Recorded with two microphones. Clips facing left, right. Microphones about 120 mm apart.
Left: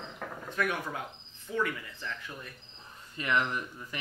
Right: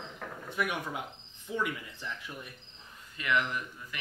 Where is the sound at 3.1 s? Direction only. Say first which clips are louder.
Left 1 dB; 35° left (ahead or behind).